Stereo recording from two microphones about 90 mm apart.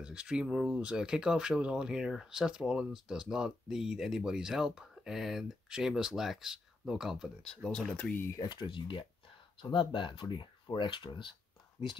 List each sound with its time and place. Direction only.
0.0 s speech: 10° right (ahead or behind); by 8.1 s 10° left (ahead or behind)
8.1 s speech: 25° left (ahead or behind)
8.4 s speech: 55° left (ahead or behind)